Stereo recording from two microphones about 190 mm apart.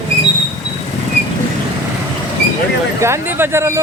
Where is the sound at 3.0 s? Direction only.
15° right (ahead or behind).